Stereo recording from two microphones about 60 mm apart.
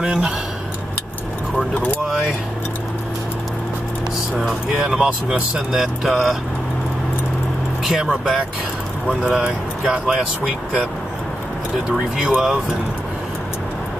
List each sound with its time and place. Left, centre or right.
0.0 s speech: centre
4.4 s speech: centre
8.0 s speech: centre
11.9 s speech: centre